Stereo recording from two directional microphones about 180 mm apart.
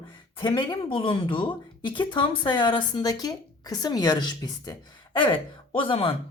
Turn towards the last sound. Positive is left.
turn(degrees=30)  # may be behind; listen again after turning